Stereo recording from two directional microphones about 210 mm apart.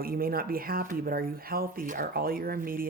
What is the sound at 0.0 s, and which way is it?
Speech, 45° right (ahead or behind).